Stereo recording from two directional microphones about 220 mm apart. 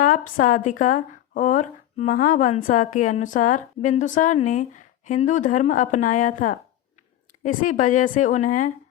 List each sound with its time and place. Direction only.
0.0 s speech: 35° left (ahead or behind)